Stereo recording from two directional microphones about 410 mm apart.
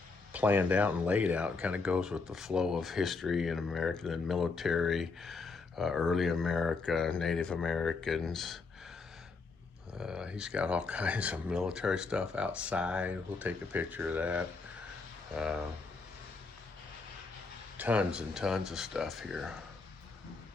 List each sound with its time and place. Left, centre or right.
0.3 s speech: centre
10.0 s speech: centre
17.7 s speech: centre